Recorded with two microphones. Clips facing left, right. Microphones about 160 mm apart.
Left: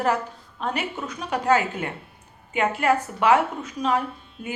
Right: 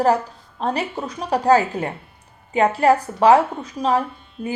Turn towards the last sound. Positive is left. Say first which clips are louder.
# right 4 dB
turn(degrees=-35)  # may be behind; listen again after turning